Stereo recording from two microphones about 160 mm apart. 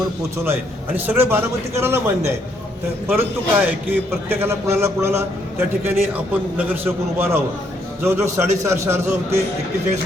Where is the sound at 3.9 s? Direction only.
15° right (ahead or behind).